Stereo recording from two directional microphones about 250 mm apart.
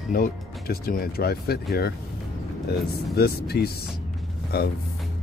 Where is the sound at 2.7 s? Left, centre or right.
Left.